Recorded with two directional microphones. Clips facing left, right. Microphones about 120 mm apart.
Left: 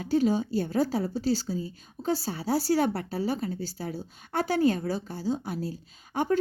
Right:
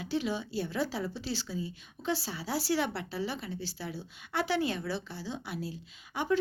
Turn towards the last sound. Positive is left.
turn(degrees=45)  # may be behind; listen again after turning